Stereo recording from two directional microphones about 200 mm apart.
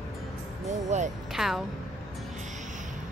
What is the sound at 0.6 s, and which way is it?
Speech, 35° right (ahead or behind).